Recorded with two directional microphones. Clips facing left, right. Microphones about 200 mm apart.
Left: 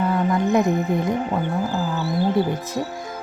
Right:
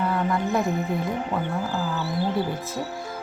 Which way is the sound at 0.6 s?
45° left (ahead or behind).